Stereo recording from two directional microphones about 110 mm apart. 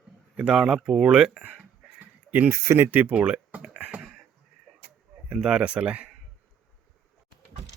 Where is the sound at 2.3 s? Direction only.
20° right (ahead or behind).